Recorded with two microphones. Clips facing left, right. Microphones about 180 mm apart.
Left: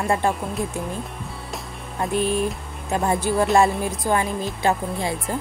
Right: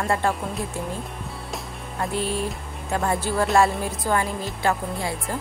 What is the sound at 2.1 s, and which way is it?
Speech, 15° left (ahead or behind).